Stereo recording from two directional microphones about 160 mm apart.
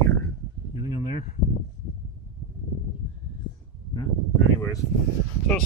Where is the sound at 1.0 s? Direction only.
50° left (ahead or behind).